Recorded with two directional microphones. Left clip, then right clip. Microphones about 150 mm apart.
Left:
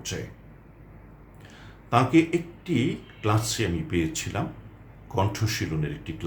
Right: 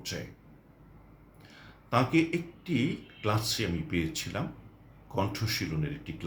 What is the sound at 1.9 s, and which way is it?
Speech, 15° left (ahead or behind).